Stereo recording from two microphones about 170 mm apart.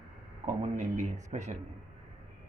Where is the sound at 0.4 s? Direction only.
45° right (ahead or behind).